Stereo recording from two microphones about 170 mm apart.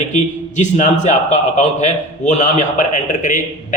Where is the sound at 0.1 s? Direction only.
45° left (ahead or behind).